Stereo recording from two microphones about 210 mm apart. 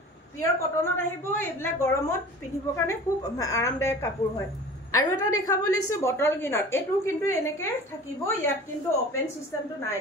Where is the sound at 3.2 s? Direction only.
15° left (ahead or behind).